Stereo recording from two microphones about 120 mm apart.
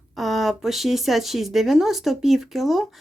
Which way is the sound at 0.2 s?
Centre (ahead or behind).